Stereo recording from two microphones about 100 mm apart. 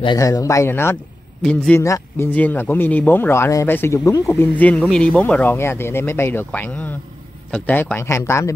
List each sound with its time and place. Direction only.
0.2 s speech: 35° left (ahead or behind); by 1.8 s 15° left (ahead or behind)
1.8 s speech: 30° left (ahead or behind)
2.3 s speech: 20° left (ahead or behind)
4.6 s speech: 15° left (ahead or behind); by 8.5 s 30° left (ahead or behind)